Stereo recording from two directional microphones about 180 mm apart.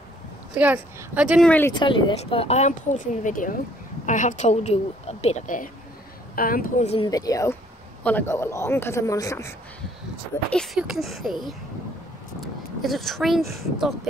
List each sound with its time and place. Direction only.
0.6 s a woman's voice: 10° right (ahead or behind)
1.4 s a woman's voice: 10° left (ahead or behind)
1.7 s a woman's voice: 25° left (ahead or behind)
3.3 s a woman's voice: 50° left (ahead or behind)
7.1 s a woman's voice: 20° left (ahead or behind)
10.5 s speech: centre (ahead or behind)
12.8 s speech: centre (ahead or behind)